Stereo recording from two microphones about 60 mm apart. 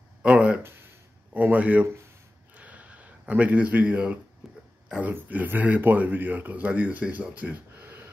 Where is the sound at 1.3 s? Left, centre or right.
Right.